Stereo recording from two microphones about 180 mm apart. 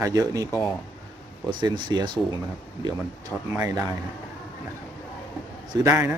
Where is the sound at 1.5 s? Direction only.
25° right (ahead or behind).